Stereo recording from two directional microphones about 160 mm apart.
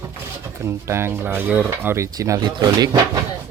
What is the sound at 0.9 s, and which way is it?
Speech, 15° right (ahead or behind).